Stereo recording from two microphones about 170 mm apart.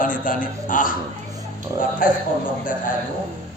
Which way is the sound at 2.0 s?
55° left (ahead or behind).